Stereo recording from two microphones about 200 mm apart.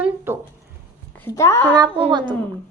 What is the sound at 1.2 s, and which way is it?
Speech, 15° left (ahead or behind).